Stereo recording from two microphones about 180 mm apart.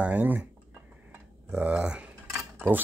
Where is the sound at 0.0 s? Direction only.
10° right (ahead or behind).